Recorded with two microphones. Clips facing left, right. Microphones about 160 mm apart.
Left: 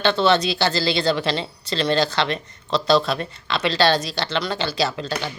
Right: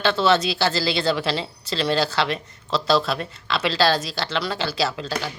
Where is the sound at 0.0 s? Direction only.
5° right (ahead or behind).